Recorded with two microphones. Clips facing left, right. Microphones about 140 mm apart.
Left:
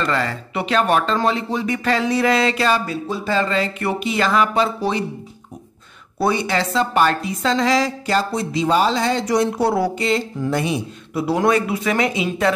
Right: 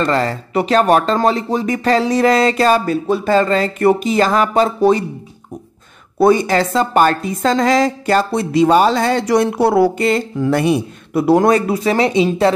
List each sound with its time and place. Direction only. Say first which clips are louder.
0.0 s speech: right 5 dB; 35° right (ahead or behind)
6.1 s a woman's voice: right 7 dB; 45° right (ahead or behind)